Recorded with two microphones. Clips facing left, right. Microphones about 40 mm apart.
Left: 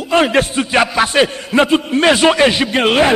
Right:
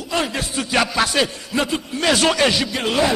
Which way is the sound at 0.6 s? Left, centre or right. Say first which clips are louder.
Even; left.